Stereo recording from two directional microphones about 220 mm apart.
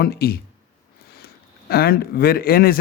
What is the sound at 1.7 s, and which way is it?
Speech, 45° left (ahead or behind).